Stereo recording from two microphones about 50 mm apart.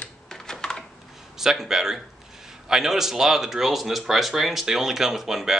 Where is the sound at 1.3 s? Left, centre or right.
Centre.